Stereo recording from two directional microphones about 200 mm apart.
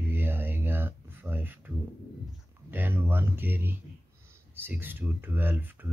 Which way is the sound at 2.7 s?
10° right (ahead or behind).